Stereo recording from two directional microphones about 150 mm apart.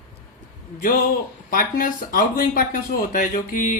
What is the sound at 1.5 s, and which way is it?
Speech, 65° left (ahead or behind).